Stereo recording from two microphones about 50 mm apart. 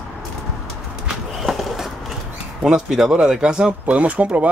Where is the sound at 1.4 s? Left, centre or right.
Centre.